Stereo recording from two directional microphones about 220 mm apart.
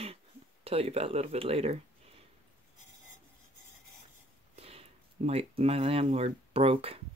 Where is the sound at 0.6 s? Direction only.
25° right (ahead or behind).